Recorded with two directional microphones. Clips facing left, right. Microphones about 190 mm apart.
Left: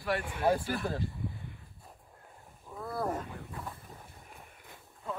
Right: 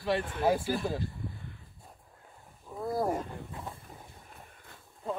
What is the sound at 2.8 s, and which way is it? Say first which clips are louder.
Wild animals: right 5 dB; 30° right (ahead or behind).